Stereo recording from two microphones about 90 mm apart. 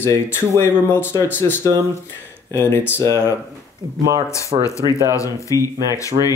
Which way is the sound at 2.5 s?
25° left (ahead or behind).